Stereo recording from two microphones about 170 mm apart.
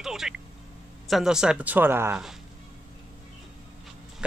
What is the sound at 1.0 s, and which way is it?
Speech, centre (ahead or behind).